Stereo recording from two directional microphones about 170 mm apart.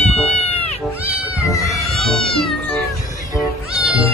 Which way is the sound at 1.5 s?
20° left (ahead or behind).